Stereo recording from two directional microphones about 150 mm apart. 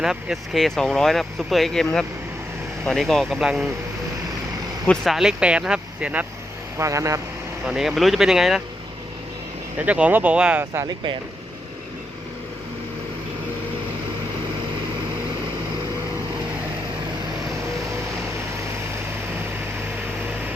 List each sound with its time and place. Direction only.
0.0 s speech: 5° right (ahead or behind)
4.9 s speech: centre (ahead or behind)
6.7 s speech: 20° right (ahead or behind)
7.6 s speech: 5° right (ahead or behind)
9.7 s speech: 10° right (ahead or behind)
10.8 s speech: 35° right (ahead or behind)